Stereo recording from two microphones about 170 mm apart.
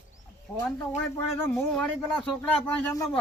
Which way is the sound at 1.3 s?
15° left (ahead or behind).